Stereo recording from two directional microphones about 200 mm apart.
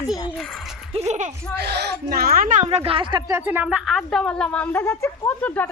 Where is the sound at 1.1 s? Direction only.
35° right (ahead or behind).